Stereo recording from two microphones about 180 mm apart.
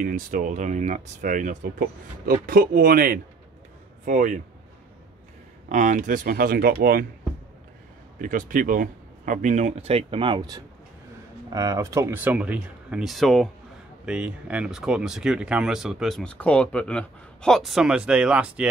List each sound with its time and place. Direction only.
0.0 s a man's voice: 45° right (ahead or behind)
5.7 s speech: 45° right (ahead or behind)
8.2 s speech: 50° right (ahead or behind); by 18.7 s 5° right (ahead or behind)